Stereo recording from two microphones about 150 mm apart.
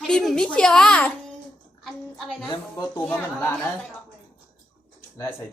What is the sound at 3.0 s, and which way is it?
Speech, 5° left (ahead or behind).